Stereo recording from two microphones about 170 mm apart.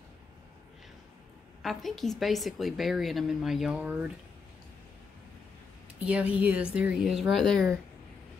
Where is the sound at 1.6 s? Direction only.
Centre (ahead or behind).